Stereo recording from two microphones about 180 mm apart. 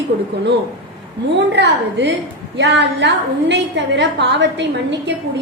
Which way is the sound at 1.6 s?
70° right (ahead or behind).